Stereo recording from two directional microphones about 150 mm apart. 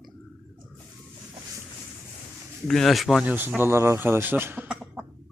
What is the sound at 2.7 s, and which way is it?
Speech, centre (ahead or behind).